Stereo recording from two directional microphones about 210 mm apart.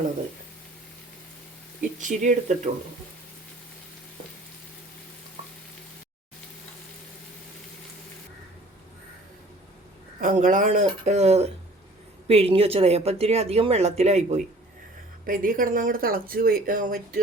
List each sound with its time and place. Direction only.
1.8 s speech: 35° right (ahead or behind)
10.2 s speech: 40° right (ahead or behind)